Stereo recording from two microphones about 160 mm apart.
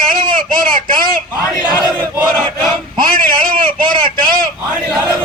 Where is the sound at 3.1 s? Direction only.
65° right (ahead or behind).